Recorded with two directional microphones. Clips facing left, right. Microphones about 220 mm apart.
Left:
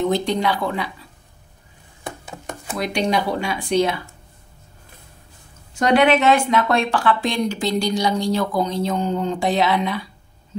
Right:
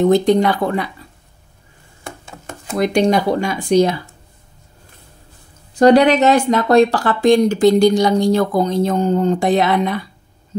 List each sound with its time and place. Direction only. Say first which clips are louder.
0.0 s speech: right 7 dB; 50° right (ahead or behind)
2.8 s speech: right 7 dB; 45° right (ahead or behind)
5.8 s speech: right 6 dB; 35° right (ahead or behind)